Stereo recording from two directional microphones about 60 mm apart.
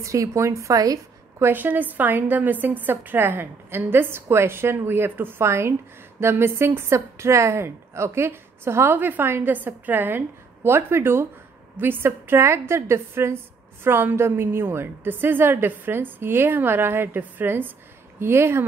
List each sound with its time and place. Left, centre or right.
0.0 s a woman's voice: right
1.5 s a woman's voice: right
5.4 s a woman's voice: right
18.2 s a woman's voice: right